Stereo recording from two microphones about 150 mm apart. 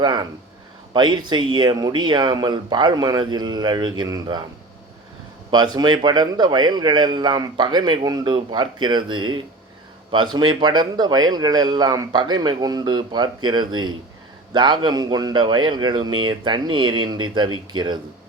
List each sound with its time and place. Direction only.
0.0 s a man's voice: 30° right (ahead or behind)
5.5 s a man's voice: 30° right (ahead or behind)